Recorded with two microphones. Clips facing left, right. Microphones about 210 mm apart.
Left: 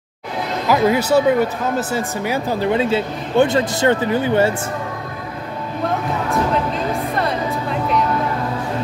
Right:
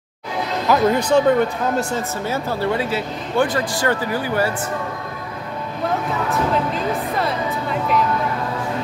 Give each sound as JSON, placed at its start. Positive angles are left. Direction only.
{"t": 0.7, "sound": "speech", "side_deg": 5}
{"t": 6.5, "sound": "music", "side_deg": 0}